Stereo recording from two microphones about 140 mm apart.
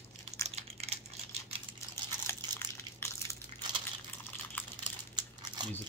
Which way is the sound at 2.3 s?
15° left (ahead or behind).